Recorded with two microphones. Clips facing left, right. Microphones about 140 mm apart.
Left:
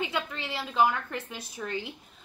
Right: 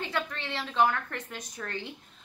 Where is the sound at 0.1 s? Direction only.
5° left (ahead or behind).